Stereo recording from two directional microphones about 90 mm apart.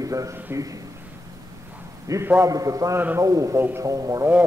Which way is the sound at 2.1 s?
40° right (ahead or behind).